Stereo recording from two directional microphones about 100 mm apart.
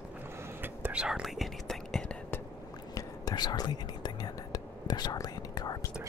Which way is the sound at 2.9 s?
40° left (ahead or behind).